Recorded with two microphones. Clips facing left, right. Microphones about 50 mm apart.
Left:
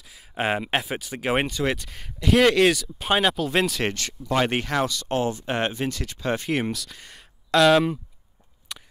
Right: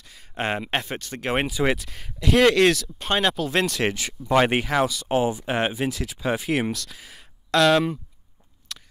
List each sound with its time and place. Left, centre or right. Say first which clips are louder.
0.0 s speech: left 2 dB; centre
3.9 s speech: right 4 dB; centre
8.7 s a sound: even; centre